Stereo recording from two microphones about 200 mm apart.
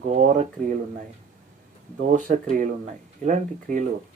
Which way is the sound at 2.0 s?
40° right (ahead or behind).